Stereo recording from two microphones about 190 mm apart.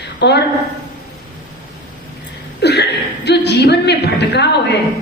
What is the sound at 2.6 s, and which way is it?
Chuckle, 60° left (ahead or behind).